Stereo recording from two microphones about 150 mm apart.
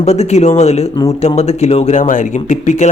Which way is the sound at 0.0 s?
50° left (ahead or behind).